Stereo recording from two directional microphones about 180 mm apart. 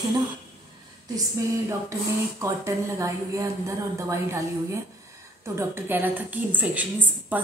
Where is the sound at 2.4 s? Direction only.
15° right (ahead or behind).